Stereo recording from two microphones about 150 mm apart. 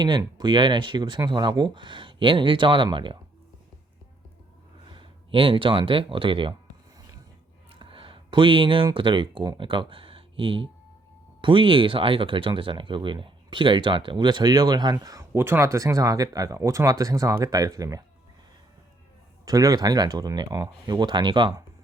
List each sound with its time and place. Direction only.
0.0 s speech: 30° right (ahead or behind)
4.9 s speech: 35° right (ahead or behind)
7.7 s speech: 35° right (ahead or behind)
19.5 s speech: 25° right (ahead or behind)